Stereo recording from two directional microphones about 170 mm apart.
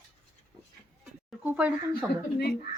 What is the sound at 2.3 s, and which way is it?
Speech, 70° left (ahead or behind).